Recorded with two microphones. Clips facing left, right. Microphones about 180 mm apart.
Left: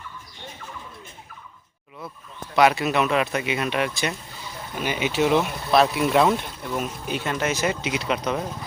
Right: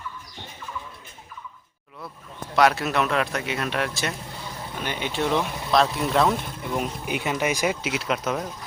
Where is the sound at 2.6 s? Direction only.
Centre (ahead or behind).